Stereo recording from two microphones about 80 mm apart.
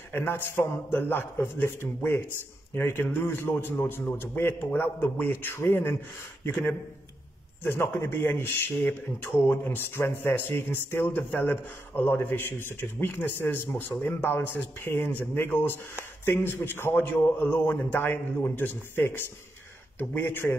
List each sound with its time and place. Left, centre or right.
0.1 s a man's voice: left
7.6 s a man's voice: left